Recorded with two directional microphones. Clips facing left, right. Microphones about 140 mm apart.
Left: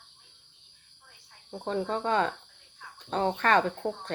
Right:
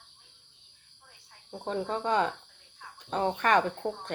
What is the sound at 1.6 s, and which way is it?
Speech, 15° right (ahead or behind).